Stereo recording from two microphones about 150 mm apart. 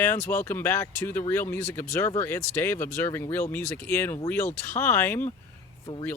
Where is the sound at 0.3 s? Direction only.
15° left (ahead or behind).